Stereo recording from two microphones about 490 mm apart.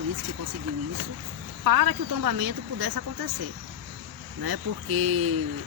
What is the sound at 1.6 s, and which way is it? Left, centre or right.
Speech, right.